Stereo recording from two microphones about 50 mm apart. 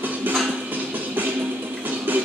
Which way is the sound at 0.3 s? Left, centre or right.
Right.